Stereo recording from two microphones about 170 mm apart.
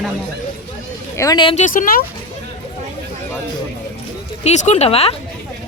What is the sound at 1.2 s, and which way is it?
Speech, 25° left (ahead or behind).